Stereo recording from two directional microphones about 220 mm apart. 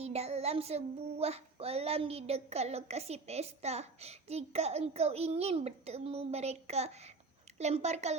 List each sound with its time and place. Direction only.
0.0 s child singing: 30° right (ahead or behind)
7.6 s a woman's voice: 30° right (ahead or behind)